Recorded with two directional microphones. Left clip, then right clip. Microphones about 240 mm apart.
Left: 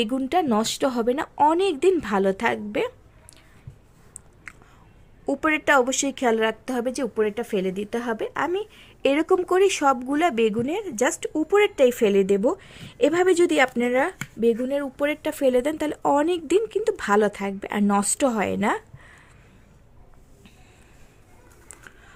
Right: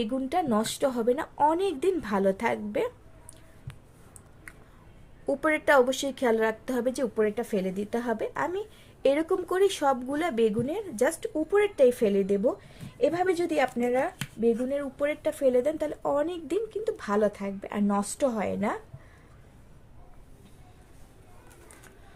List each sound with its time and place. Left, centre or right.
0.0 s speech: left
4.5 s a sound: left
5.2 s speech: left